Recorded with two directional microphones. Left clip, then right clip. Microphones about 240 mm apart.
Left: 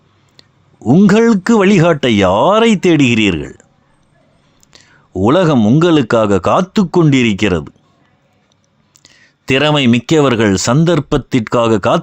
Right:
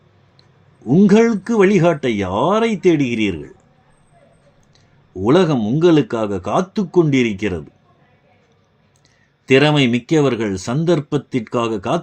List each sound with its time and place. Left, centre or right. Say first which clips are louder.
0.9 s speech: left 3 dB; left
4.7 s speech: left 9 dB; left
9.0 s speech: even; left